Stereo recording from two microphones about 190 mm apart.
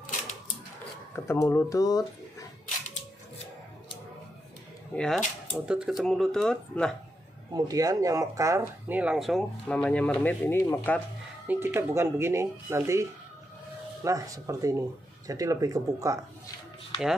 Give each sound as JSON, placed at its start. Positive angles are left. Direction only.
{"t": 1.1, "sound": "speech", "side_deg": 15}
{"t": 4.9, "sound": "speech", "side_deg": 5}
{"t": 7.5, "sound": "speech", "side_deg": -20}
{"t": 11.4, "sound": "speech", "side_deg": -10}
{"t": 14.0, "sound": "speech", "side_deg": -15}